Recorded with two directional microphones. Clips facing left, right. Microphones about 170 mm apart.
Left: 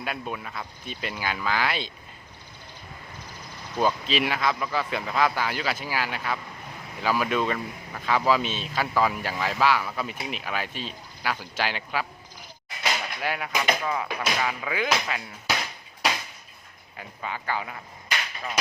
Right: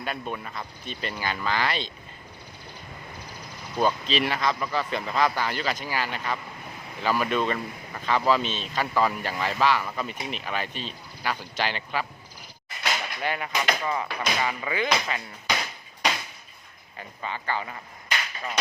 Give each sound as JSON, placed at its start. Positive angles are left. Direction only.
{"t": 0.0, "sound": "speech", "side_deg": 5}
{"t": 3.8, "sound": "speech", "side_deg": 5}
{"t": 17.0, "sound": "speech", "side_deg": 5}